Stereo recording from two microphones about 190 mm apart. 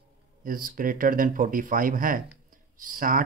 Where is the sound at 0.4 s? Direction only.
45° right (ahead or behind).